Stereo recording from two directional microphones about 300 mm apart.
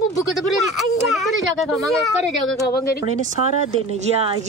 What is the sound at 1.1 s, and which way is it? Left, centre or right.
Speech, centre.